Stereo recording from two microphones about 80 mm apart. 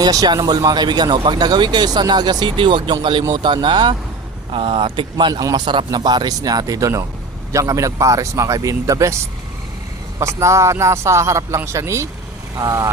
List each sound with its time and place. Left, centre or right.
0.0 s speech: right
3.3 s speech: right
4.5 s speech: right
5.3 s speech: right
5.6 s a man's voice: right
10.2 s a man's voice: right